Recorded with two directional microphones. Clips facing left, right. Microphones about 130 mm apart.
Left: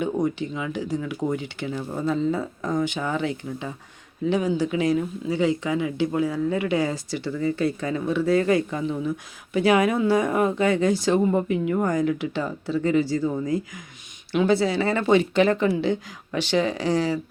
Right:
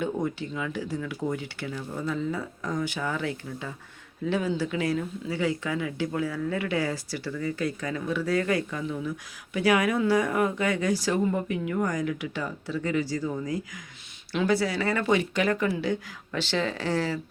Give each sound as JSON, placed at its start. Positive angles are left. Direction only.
{"t": 0.0, "sound": "speech", "side_deg": 20}